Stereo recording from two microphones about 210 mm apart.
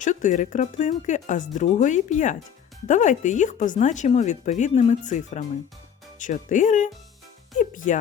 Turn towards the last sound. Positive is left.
turn(degrees=40)  # may be behind; listen again after turning